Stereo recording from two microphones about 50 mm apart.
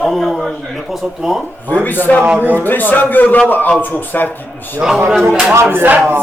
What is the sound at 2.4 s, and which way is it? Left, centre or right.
Speech, right.